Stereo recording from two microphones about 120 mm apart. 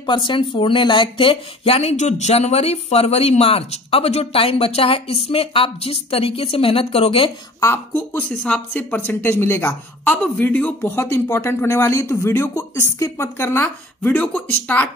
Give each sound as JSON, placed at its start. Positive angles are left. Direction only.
{"t": 0.0, "sound": "speech", "side_deg": 45}
{"t": 7.6, "sound": "speech", "side_deg": 20}
{"t": 10.2, "sound": "speech", "side_deg": 10}